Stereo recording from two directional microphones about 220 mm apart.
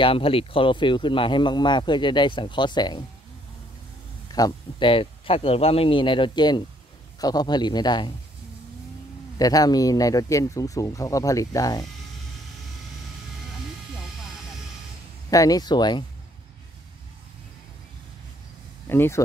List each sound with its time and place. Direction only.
0.0 s speech: 25° left (ahead or behind)
4.3 s speech: 15° left (ahead or behind)
9.4 s speech: 15° left (ahead or behind)
15.2 s speech: 15° left (ahead or behind)
18.9 s speech: 10° left (ahead or behind)